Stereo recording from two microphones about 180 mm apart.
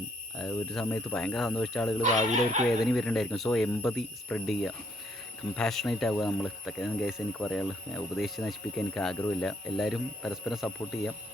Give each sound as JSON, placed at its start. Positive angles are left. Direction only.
{"t": 0.3, "sound": "speech", "side_deg": 0}
{"t": 2.3, "sound": "speech", "side_deg": -40}
{"t": 2.8, "sound": "speech", "side_deg": 0}